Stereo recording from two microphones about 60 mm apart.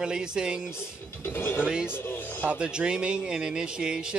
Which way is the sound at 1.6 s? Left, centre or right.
Centre.